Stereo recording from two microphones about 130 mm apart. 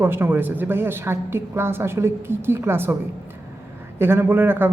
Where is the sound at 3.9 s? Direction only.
15° right (ahead or behind).